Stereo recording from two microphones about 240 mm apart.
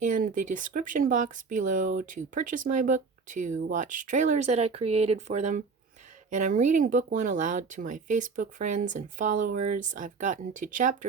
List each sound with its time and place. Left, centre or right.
0.1 s speech: right